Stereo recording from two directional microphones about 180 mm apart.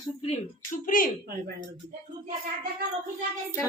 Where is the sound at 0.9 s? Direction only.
50° left (ahead or behind).